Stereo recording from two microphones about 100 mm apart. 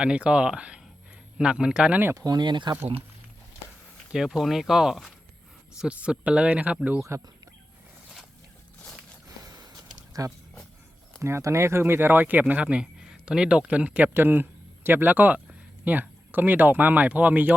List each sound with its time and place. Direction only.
0.0 s speech: 10° right (ahead or behind)
2.1 s speech: 40° right (ahead or behind)
4.1 s speech: centre (ahead or behind)
7.1 s speech: 30° right (ahead or behind)
9.4 s a sound: 35° right (ahead or behind)
11.2 s speech: 25° right (ahead or behind)